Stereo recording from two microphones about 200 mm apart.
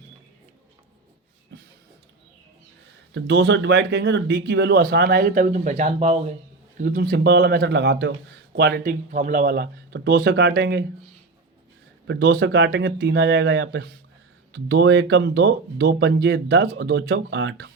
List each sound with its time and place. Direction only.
1.5 s a sound: 60° right (ahead or behind)
3.2 s speech: 55° right (ahead or behind)
12.0 s speech: 55° right (ahead or behind)